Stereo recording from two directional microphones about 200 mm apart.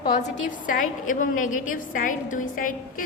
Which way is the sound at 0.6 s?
40° left (ahead or behind).